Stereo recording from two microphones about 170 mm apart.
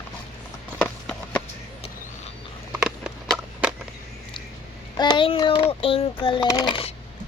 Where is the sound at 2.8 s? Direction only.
5° right (ahead or behind).